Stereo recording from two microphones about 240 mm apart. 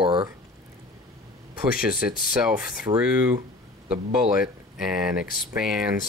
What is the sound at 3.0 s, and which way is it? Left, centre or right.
Speech, centre.